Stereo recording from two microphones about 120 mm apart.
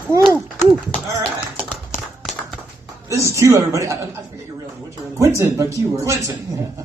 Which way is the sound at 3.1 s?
25° right (ahead or behind).